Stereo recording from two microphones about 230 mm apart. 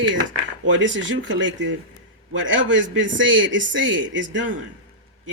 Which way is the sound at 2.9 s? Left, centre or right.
Right.